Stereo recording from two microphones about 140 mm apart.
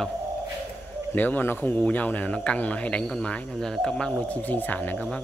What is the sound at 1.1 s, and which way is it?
A man's voice, 10° left (ahead or behind).